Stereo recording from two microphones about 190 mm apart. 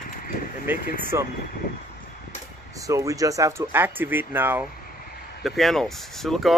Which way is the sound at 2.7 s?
15° right (ahead or behind).